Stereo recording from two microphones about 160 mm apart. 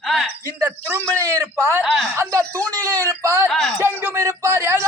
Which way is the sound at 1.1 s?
20° right (ahead or behind).